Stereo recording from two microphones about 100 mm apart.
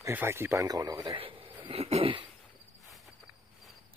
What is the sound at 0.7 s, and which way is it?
Speech, 40° right (ahead or behind).